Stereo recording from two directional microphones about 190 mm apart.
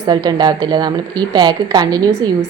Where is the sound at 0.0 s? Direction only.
20° right (ahead or behind).